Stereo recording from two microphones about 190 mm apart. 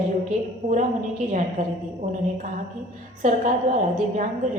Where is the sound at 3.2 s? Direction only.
40° right (ahead or behind).